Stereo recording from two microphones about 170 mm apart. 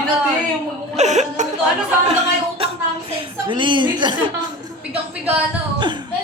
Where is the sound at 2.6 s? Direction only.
35° right (ahead or behind).